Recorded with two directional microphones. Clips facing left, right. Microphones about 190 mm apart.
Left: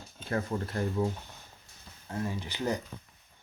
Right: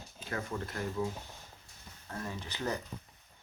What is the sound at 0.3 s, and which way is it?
Speech, 35° left (ahead or behind).